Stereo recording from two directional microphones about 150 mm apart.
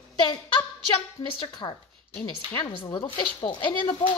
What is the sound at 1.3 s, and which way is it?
Speech, 35° left (ahead or behind).